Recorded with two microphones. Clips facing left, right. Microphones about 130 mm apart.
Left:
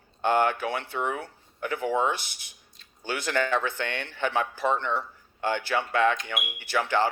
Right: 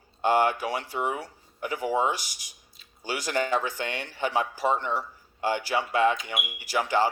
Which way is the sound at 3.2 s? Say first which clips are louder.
Even; 10° right (ahead or behind).